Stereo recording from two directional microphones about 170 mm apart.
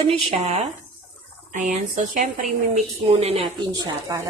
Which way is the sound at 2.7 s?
40° right (ahead or behind).